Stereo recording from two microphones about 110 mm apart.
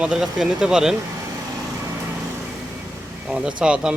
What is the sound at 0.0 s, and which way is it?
Speech, 5° right (ahead or behind).